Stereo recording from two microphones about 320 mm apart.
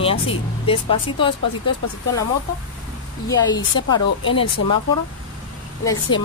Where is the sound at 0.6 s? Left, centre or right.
Centre.